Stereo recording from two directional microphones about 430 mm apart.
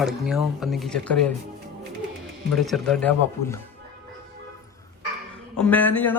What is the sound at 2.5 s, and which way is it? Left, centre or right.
Speech, centre.